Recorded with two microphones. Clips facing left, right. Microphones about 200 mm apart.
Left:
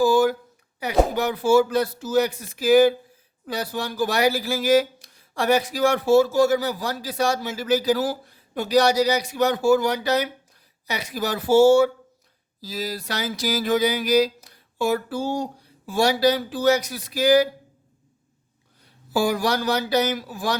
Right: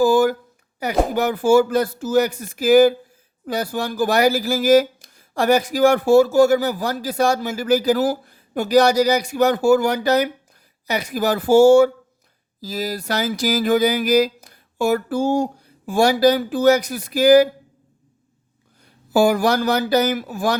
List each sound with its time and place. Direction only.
0.0 s a sound: 50° right (ahead or behind)
0.8 s speech: 45° right (ahead or behind)
19.1 s speech: 50° right (ahead or behind)